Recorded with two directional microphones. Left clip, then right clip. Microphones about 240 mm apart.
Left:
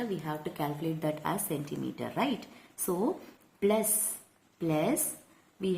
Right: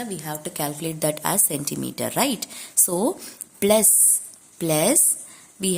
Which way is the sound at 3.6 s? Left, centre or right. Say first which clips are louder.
Right 10 dB; right.